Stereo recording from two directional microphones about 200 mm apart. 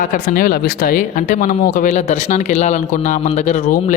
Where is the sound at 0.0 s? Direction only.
45° left (ahead or behind).